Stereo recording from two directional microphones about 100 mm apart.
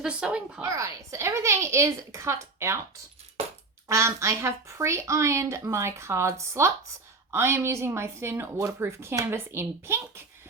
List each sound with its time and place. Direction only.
0.0 s speech: 10° right (ahead or behind)
0.6 s speech: 30° right (ahead or behind)
3.8 s speech: 30° right (ahead or behind)